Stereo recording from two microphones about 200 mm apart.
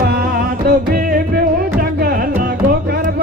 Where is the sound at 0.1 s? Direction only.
50° right (ahead or behind).